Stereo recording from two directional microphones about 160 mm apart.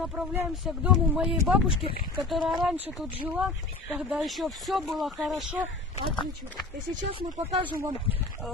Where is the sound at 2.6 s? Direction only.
5° right (ahead or behind).